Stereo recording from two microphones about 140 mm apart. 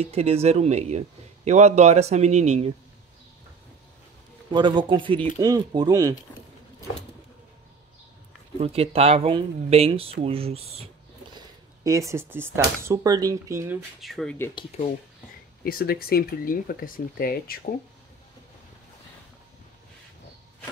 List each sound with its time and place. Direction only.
0.0 s a man's voice: 50° right (ahead or behind)
4.5 s speech: 35° right (ahead or behind)
8.5 s a man's voice: 45° right (ahead or behind)
11.3 s speech: 20° right (ahead or behind)
14.0 s speech: 5° left (ahead or behind)
15.6 s speech: 90° left